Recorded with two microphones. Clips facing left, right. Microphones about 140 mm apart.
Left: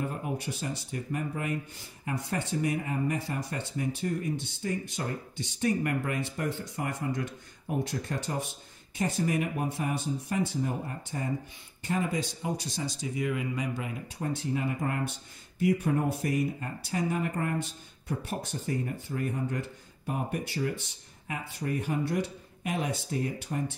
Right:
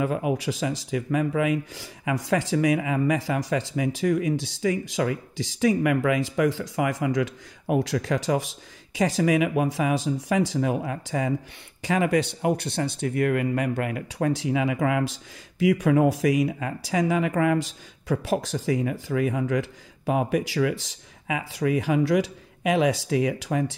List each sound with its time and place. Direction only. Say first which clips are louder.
0.0 s speech: right 9 dB; 90° right